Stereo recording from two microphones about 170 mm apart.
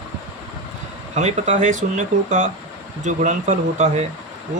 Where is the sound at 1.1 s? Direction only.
40° right (ahead or behind).